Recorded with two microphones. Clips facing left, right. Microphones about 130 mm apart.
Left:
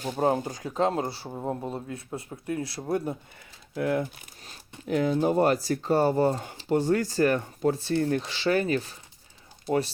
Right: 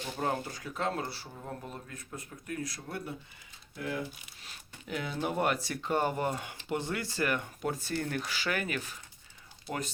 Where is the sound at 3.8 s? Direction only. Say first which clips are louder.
Left 9 dB; 55° left (ahead or behind); by 4.5 s 40° left (ahead or behind).